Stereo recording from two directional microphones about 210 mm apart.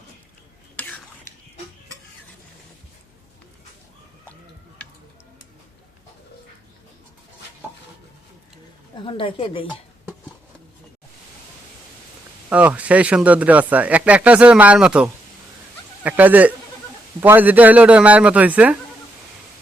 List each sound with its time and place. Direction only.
0.8 s whispering: 10° left (ahead or behind)
9.0 s a woman's voice: 25° left (ahead or behind)
12.5 s speech: 5° right (ahead or behind)